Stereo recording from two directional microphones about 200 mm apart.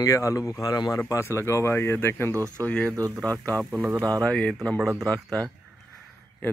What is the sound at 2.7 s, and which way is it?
Speech, 5° left (ahead or behind).